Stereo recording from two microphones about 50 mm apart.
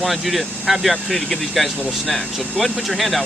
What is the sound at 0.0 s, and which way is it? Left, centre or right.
Speech, centre.